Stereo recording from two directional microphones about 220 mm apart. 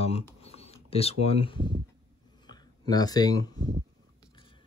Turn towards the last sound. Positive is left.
turn(degrees=15)  # may be behind; listen again after turning